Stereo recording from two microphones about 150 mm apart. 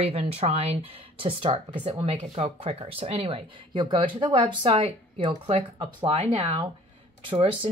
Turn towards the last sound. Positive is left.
turn(degrees=-35)  # may be behind; listen again after turning